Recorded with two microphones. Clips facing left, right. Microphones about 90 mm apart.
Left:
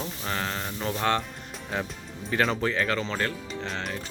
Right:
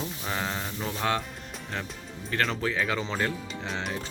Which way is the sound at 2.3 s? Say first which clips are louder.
Left 3 dB; 5° left (ahead or behind).